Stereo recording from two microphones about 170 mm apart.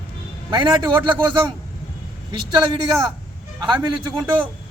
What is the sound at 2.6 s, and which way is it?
Speech, 25° right (ahead or behind).